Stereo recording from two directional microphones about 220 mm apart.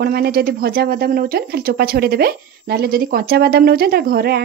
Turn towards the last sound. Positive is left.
turn(degrees=-45)  # may be behind; listen again after turning